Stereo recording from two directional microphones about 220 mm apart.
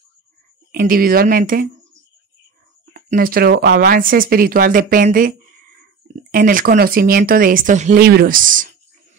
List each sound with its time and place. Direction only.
0.7 s speech: 40° right (ahead or behind)
2.9 s speech: 40° right (ahead or behind)
6.3 s speech: 40° right (ahead or behind)